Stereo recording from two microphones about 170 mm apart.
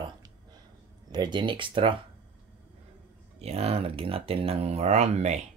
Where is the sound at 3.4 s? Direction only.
40° right (ahead or behind).